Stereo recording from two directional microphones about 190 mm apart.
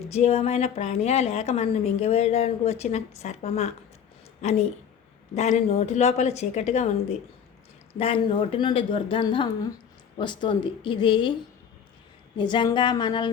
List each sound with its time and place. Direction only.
0.1 s a woman's voice: 35° left (ahead or behind)
7.9 s a woman's voice: 30° left (ahead or behind)
12.4 s a woman's voice: 25° left (ahead or behind)